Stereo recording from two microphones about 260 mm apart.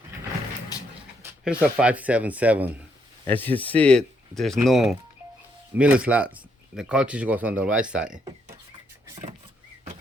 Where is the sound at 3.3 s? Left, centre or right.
Centre.